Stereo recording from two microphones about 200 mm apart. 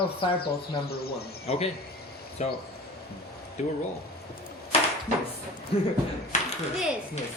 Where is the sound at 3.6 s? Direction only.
35° left (ahead or behind).